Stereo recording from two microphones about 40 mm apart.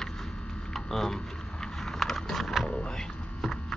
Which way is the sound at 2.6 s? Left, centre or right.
Left.